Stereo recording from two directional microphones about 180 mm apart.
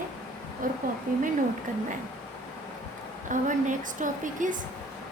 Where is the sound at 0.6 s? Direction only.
50° right (ahead or behind).